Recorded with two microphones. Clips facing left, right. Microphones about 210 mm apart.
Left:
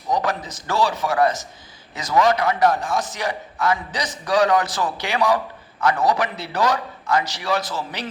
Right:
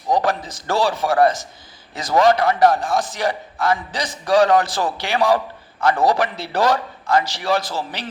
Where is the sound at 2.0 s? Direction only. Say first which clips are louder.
Right 3 dB; 30° right (ahead or behind).